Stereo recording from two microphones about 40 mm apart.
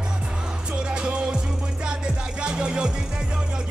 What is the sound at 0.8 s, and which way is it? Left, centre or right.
Music, right.